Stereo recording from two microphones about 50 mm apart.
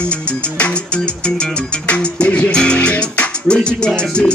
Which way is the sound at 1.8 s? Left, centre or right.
Left.